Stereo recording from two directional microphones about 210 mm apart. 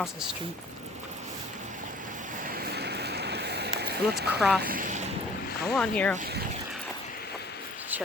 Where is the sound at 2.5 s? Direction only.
45° right (ahead or behind).